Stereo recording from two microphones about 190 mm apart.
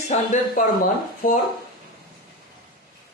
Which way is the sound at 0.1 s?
35° left (ahead or behind).